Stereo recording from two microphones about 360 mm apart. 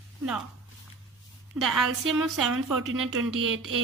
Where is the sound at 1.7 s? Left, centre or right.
Right.